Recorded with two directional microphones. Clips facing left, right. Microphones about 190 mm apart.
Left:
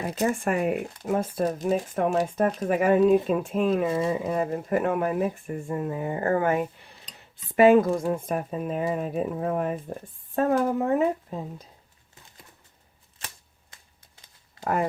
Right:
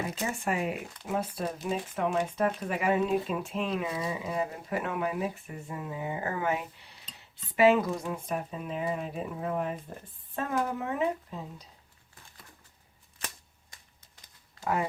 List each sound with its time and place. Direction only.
0.2 s speech: 50° left (ahead or behind)
14.6 s speech: 50° left (ahead or behind)